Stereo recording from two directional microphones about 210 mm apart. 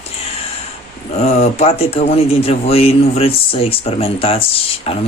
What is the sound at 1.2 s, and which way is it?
Speech, 30° left (ahead or behind).